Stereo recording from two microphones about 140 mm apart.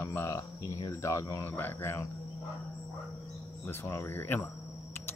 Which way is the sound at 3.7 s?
15° left (ahead or behind).